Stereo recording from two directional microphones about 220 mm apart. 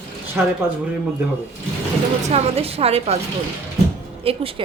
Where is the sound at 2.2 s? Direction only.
30° right (ahead or behind).